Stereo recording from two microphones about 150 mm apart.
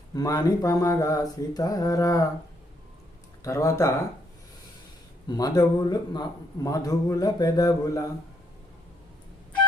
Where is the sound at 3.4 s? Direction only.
20° left (ahead or behind).